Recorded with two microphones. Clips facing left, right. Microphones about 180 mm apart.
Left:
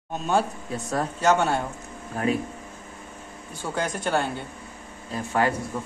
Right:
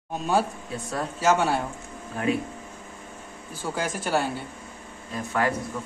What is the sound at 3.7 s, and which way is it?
Speech, 5° right (ahead or behind).